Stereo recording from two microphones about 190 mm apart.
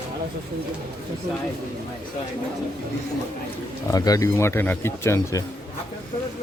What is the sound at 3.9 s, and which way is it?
Speech, 20° left (ahead or behind).